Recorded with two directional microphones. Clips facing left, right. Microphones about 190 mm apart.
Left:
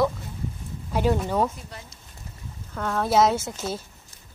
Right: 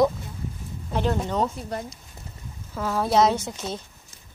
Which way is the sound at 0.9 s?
10° left (ahead or behind).